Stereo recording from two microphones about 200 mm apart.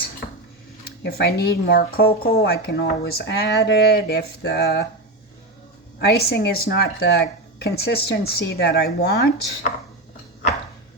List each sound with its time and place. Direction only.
1.0 s speech: 55° left (ahead or behind)
6.0 s speech: 55° left (ahead or behind)